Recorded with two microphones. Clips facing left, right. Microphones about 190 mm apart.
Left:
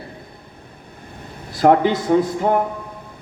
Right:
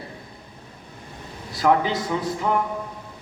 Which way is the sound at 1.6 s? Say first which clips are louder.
Left 6 dB; 55° left (ahead or behind).